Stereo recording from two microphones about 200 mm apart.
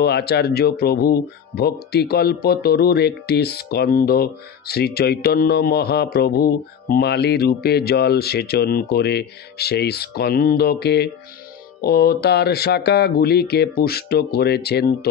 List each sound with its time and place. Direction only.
0.0 s speech: 55° left (ahead or behind)